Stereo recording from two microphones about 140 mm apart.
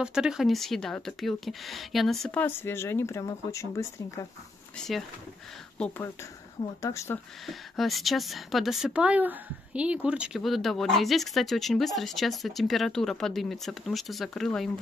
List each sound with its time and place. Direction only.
0.0 s speech: 5° right (ahead or behind); by 4.3 s 20° left (ahead or behind)
4.7 s speech: centre (ahead or behind)
6.8 s speech: 20° left (ahead or behind)
7.4 s speech: centre (ahead or behind)